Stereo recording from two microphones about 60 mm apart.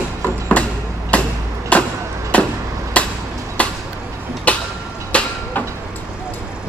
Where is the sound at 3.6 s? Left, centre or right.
Left.